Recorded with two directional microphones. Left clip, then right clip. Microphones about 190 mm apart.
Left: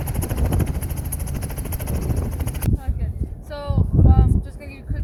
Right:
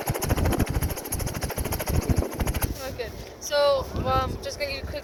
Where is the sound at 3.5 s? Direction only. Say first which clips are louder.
Right 8 dB; 55° right (ahead or behind).